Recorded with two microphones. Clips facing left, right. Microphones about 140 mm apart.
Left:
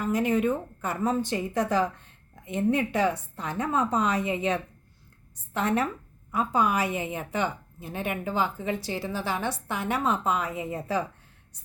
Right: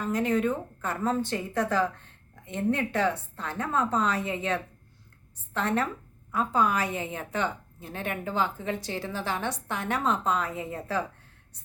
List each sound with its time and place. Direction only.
0.0 s a woman's voice: 10° left (ahead or behind)